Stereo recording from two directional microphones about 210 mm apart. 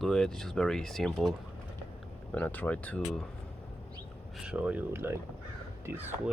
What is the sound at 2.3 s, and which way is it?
Speech, 5° left (ahead or behind).